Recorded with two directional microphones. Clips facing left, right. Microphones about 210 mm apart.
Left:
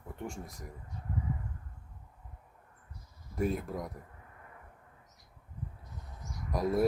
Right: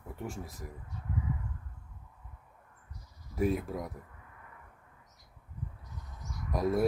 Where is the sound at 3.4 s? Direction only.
Centre (ahead or behind).